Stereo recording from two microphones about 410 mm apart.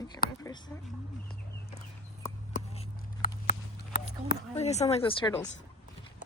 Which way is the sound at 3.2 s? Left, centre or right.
Centre.